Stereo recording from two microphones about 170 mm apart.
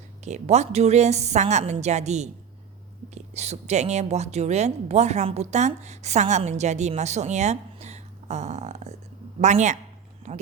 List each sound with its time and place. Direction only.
0.3 s a woman's voice: 40° right (ahead or behind)